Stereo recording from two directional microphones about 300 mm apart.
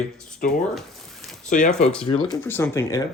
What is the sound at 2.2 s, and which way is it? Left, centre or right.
Speech, centre.